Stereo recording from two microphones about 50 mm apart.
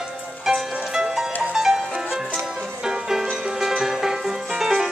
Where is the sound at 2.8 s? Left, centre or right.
Centre.